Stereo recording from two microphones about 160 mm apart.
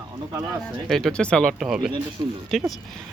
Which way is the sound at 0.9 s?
5° left (ahead or behind).